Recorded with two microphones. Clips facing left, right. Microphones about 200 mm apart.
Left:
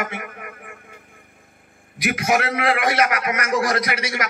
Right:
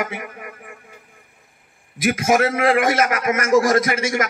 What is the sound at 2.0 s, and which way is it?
A man's voice, 45° right (ahead or behind).